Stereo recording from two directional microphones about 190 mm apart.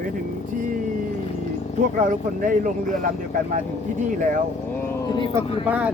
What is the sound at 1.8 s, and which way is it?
Speech, 45° right (ahead or behind).